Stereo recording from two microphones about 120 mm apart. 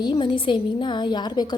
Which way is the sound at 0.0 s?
40° left (ahead or behind).